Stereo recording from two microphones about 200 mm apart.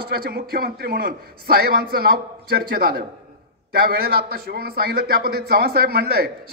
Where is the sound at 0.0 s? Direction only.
50° right (ahead or behind).